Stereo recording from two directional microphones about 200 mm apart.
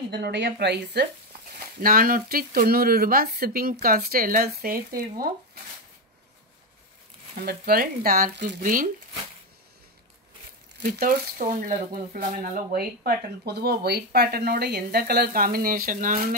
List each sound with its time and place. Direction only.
0.1 s speech: 55° right (ahead or behind)
1.8 s speech: 45° right (ahead or behind)
7.4 s speech: 50° right (ahead or behind)
10.8 s speech: 45° right (ahead or behind)